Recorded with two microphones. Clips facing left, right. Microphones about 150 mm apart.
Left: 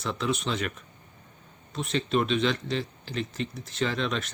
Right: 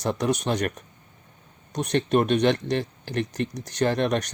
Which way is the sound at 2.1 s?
55° right (ahead or behind).